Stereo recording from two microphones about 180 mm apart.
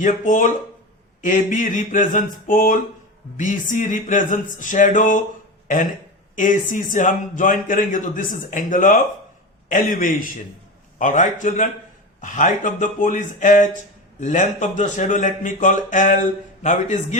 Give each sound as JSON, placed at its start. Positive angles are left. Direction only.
{"t": 0.0, "sound": "speech", "side_deg": 45}